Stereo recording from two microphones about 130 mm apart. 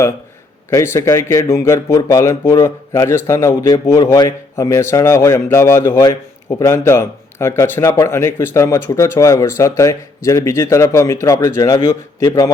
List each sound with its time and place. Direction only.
0.7 s speech: 20° left (ahead or behind)